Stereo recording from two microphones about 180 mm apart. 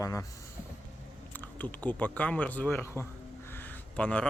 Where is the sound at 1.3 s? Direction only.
10° left (ahead or behind).